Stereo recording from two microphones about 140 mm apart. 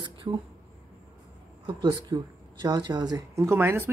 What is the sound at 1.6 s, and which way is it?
Speech, 35° right (ahead or behind).